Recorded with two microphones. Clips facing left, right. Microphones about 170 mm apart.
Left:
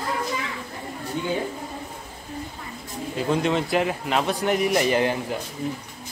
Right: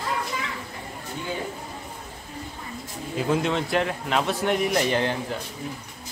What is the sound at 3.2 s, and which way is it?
A man's voice, centre (ahead or behind).